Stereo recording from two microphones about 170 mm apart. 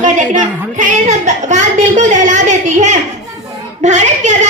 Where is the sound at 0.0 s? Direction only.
45° right (ahead or behind).